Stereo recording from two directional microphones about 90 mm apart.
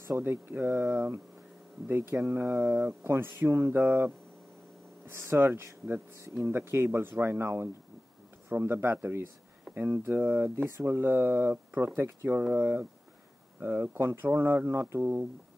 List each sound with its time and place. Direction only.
0.1 s speech: 25° right (ahead or behind)
12.4 s speech: 20° right (ahead or behind)